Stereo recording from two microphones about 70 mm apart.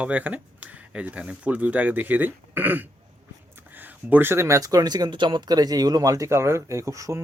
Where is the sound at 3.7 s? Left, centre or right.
Right.